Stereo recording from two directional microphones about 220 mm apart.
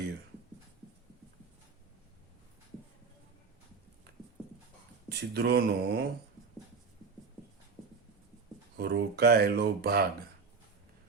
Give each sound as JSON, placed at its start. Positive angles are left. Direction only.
{"t": 5.1, "sound": "speech", "side_deg": -50}
{"t": 8.8, "sound": "speech", "side_deg": -50}